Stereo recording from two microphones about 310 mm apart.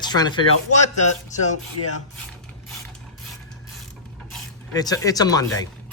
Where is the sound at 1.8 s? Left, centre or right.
Left.